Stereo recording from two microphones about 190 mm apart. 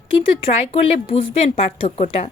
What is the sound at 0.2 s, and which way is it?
A woman's voice, 35° left (ahead or behind).